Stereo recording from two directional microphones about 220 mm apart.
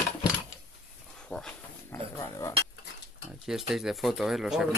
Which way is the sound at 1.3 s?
5° left (ahead or behind).